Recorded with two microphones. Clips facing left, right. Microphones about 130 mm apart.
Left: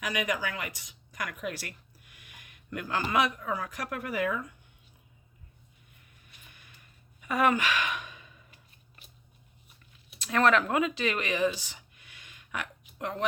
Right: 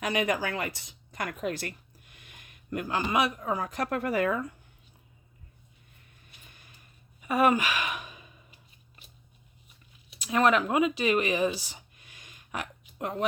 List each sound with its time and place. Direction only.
0.0 s speech: 30° right (ahead or behind)
3.8 s speech: 35° right (ahead or behind)
7.2 s sigh: 25° right (ahead or behind)
10.2 s speech: 15° right (ahead or behind)
12.5 s a sound: 25° right (ahead or behind)